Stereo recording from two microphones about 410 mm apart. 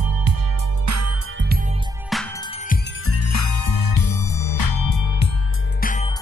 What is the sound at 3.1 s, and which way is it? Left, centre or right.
Music, left.